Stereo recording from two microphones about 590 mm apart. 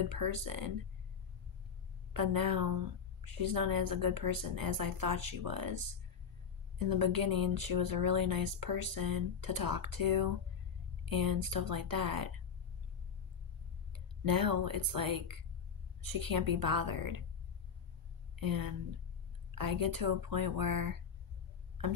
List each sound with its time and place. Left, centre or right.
0.1 s a woman's voice: right
2.1 s a woman's voice: right
13.9 s a woman's voice: right
18.4 s a woman's voice: right